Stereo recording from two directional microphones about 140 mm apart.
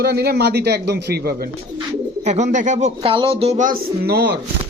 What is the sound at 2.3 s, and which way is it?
Speech, 55° right (ahead or behind).